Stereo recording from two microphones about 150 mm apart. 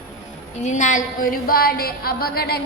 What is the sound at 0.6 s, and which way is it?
A woman's voice, 55° left (ahead or behind).